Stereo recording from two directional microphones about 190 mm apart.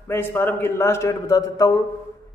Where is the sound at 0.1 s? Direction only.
10° left (ahead or behind).